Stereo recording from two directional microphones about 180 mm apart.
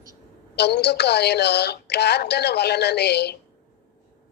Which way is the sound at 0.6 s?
65° left (ahead or behind).